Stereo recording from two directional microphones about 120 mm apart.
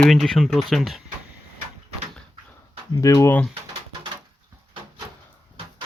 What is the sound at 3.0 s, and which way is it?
Speech, 30° left (ahead or behind).